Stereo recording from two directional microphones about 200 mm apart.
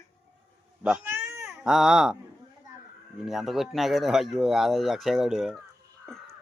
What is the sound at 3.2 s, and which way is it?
Speech, centre (ahead or behind).